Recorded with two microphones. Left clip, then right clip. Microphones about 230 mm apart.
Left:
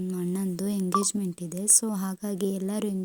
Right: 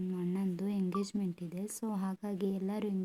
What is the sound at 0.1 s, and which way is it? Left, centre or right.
A woman's voice, centre.